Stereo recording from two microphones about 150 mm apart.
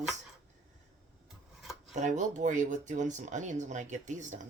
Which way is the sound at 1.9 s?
55° right (ahead or behind).